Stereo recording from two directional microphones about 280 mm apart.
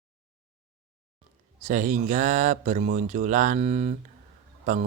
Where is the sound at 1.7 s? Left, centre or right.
Right.